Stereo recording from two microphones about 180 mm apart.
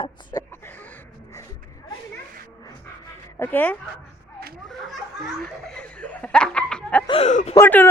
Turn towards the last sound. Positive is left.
turn(degrees=15)  # may be behind; listen again after turning